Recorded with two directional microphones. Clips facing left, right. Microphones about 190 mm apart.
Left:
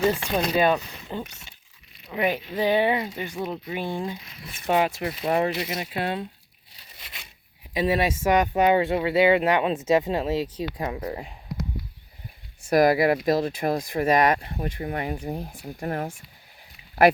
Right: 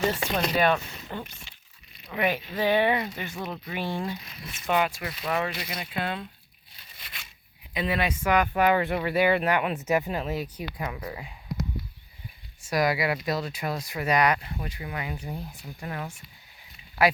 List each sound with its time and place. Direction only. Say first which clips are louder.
0.1 s speech: left 3 dB; 15° left (ahead or behind)
4.6 s speech: left 3 dB; 30° left (ahead or behind)
7.8 s speech: left 5 dB; 25° left (ahead or behind)
12.6 s speech: left 7 dB; 50° left (ahead or behind)